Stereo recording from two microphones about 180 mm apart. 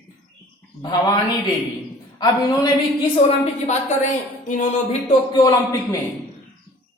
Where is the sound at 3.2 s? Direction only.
40° left (ahead or behind).